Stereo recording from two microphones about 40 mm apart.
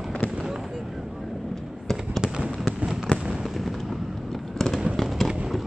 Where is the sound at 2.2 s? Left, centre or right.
Right.